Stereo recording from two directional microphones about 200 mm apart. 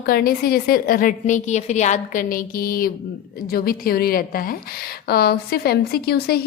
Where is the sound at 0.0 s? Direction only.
50° left (ahead or behind).